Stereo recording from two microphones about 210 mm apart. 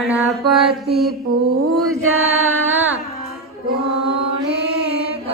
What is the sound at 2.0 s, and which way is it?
Chant, 80° right.